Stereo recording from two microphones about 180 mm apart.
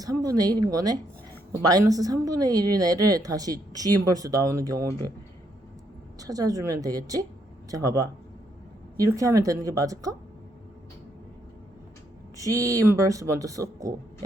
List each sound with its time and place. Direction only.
0.0 s speech: 20° right (ahead or behind)
6.1 s speech: 20° right (ahead or behind)
12.4 s speech: 20° right (ahead or behind)